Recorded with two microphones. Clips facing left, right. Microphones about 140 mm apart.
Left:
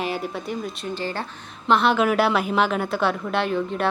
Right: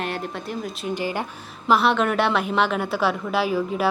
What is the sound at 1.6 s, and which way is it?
A woman's voice, 5° right (ahead or behind).